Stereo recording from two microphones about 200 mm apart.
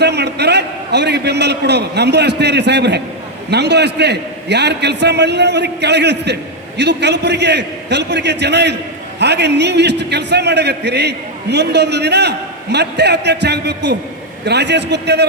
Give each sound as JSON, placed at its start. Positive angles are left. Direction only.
{"t": 0.0, "sound": "a man's voice", "side_deg": -55}